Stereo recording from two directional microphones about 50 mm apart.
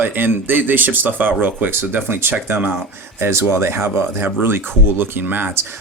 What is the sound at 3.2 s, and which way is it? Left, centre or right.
Speech, right.